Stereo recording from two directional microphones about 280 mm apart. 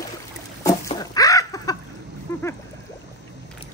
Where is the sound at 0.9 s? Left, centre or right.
Centre.